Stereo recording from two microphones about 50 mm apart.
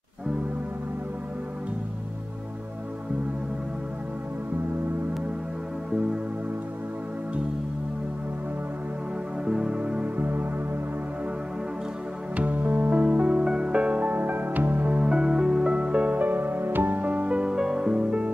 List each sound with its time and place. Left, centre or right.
9.4 s music: centre
10.1 s music: right
12.4 s music: right
15.0 s music: centre